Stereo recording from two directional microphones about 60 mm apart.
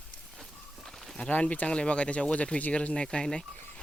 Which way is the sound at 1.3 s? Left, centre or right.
Left.